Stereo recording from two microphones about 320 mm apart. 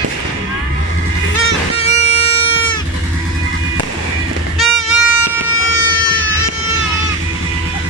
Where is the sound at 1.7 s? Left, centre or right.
Centre.